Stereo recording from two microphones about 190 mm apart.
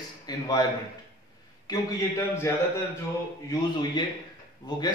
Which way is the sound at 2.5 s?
15° left (ahead or behind).